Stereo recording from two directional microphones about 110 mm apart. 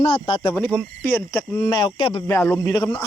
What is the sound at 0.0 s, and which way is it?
Speech, 50° left (ahead or behind).